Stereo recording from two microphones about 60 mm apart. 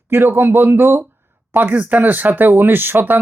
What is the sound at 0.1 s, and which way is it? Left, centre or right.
Speech, right.